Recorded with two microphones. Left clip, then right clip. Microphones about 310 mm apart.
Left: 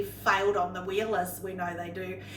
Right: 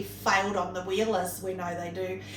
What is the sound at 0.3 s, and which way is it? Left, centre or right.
Speech, centre.